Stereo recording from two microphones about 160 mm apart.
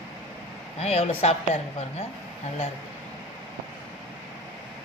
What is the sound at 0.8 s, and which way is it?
Speech, 40° left (ahead or behind).